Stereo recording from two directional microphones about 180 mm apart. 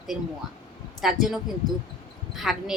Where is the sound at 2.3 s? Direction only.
Centre (ahead or behind).